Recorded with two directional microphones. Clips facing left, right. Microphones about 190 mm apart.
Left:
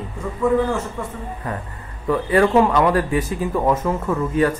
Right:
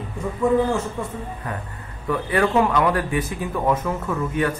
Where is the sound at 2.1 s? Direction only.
35° left (ahead or behind).